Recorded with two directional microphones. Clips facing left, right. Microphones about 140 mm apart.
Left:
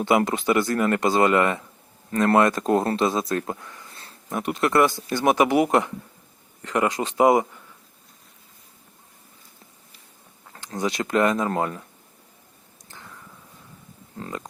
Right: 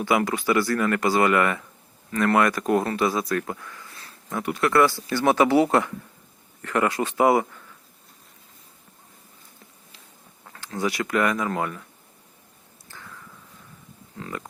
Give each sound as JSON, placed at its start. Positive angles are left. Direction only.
{"t": 0.0, "sound": "speech", "side_deg": 25}
{"t": 10.8, "sound": "speech", "side_deg": 20}
{"t": 12.9, "sound": "a sound", "side_deg": 20}
{"t": 14.2, "sound": "speech", "side_deg": 25}